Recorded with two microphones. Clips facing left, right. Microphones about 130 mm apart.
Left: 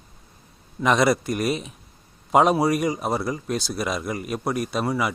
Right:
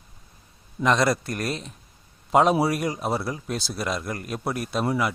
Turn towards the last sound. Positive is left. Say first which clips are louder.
# even
turn(degrees=0)  # may be behind; listen again after turning